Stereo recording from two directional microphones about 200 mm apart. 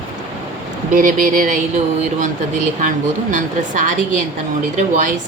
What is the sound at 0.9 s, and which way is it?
Speech, 40° right (ahead or behind).